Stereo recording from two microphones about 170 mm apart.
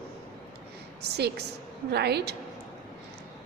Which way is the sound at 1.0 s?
75° right (ahead or behind).